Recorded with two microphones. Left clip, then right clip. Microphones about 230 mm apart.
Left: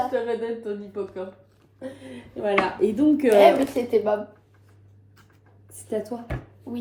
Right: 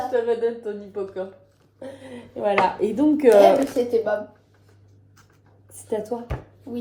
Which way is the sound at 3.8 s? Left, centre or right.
Left.